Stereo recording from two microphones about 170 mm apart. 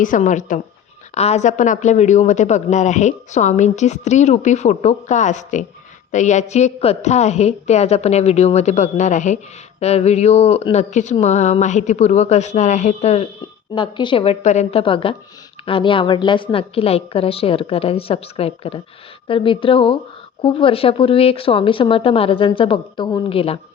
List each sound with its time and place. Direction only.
0.0 s speech: 50° left (ahead or behind)
13.7 s a woman's voice: 25° left (ahead or behind)
14.4 s speech: 40° left (ahead or behind)